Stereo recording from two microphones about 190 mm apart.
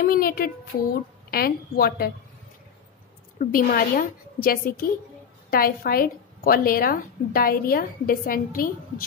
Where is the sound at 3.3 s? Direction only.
45° left (ahead or behind).